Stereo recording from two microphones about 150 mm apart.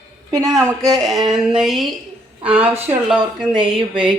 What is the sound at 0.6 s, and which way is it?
Speech, 25° right (ahead or behind).